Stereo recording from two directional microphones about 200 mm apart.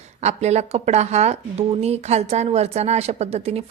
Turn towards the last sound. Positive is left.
turn(degrees=-30)  # may be behind; listen again after turning